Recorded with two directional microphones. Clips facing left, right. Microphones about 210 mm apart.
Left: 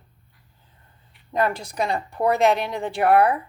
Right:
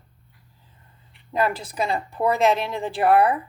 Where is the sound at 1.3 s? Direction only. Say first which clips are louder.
Even; 5° right (ahead or behind).